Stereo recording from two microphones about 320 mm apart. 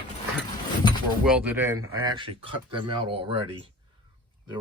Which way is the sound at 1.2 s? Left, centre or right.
Centre.